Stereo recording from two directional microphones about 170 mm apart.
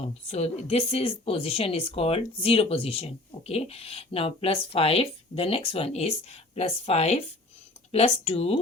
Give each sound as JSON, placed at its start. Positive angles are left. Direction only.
{"t": 0.3, "sound": "speech", "side_deg": 40}